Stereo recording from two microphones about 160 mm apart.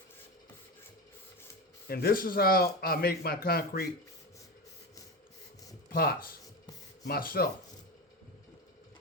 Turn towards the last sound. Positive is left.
turn(degrees=70)  # may be behind; listen again after turning